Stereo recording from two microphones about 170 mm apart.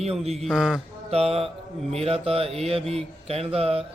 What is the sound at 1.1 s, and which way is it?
Mantra, 35° right (ahead or behind).